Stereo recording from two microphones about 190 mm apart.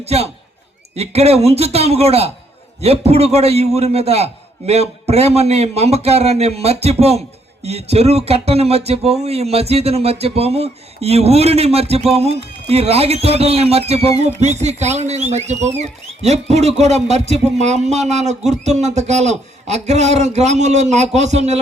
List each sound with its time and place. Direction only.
0.0 s speech: 35° right (ahead or behind)